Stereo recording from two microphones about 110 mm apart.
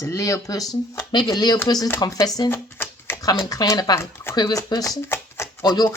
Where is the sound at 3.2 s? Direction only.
35° left (ahead or behind).